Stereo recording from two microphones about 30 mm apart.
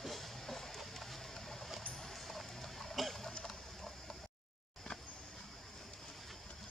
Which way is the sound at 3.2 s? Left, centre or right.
Centre.